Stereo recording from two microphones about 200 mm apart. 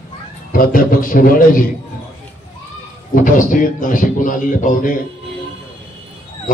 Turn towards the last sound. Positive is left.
turn(degrees=40)  # may be behind; listen again after turning